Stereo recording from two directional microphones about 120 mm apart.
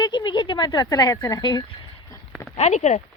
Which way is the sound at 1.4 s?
40° left (ahead or behind).